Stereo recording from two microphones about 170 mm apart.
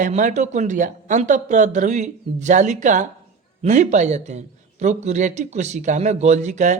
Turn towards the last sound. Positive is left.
turn(degrees=-45)  # may be behind; listen again after turning